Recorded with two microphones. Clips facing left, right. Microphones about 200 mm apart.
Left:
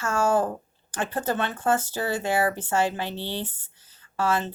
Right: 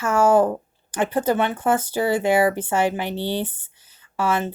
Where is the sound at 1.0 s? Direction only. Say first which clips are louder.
Right 6 dB; 15° right (ahead or behind).